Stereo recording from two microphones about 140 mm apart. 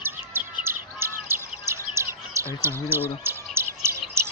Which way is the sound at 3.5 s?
20° right (ahead or behind).